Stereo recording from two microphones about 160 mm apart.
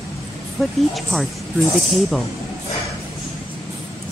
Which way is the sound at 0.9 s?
Centre (ahead or behind).